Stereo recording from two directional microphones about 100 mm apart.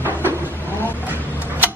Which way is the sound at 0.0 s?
20° right (ahead or behind).